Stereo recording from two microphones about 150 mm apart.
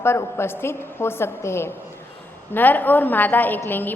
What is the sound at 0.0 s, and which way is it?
A woman's voice, 15° left (ahead or behind).